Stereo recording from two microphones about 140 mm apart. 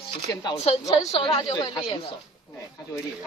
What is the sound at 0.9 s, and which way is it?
Speech, 35° left (ahead or behind).